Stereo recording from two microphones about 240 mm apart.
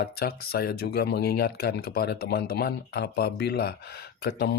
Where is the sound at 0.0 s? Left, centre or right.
Left.